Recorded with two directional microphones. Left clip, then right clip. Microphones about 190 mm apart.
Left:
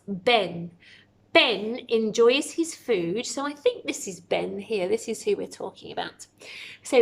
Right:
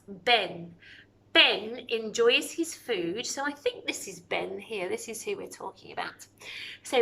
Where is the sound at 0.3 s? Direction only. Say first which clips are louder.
Left 3 dB; 25° left (ahead or behind).